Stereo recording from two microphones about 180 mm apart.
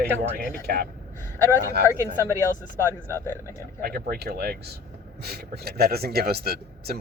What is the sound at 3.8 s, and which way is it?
Speech, 55° right (ahead or behind).